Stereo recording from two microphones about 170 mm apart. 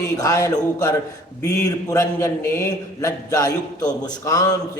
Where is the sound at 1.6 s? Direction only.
20° left (ahead or behind).